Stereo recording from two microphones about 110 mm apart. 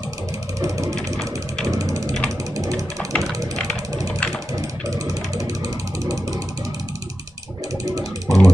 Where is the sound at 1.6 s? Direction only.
30° right (ahead or behind).